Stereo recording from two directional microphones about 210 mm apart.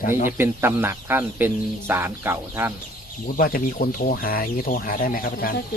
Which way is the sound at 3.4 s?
45° left (ahead or behind).